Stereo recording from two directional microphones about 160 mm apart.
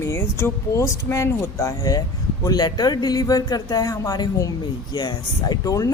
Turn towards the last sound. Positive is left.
turn(degrees=20)  # may be behind; listen again after turning